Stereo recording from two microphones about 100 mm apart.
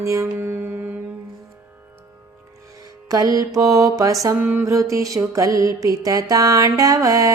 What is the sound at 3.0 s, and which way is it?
Music, 35° right (ahead or behind).